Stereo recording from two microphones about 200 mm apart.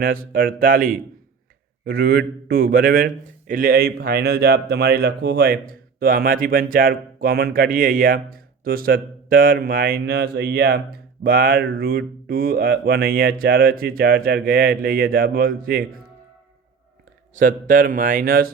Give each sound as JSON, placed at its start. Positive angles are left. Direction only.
{"t": 0.0, "sound": "speech", "side_deg": -45}
{"t": 17.3, "sound": "speech", "side_deg": -40}